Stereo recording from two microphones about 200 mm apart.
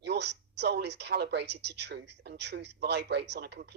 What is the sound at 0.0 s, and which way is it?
Speech, 60° right (ahead or behind).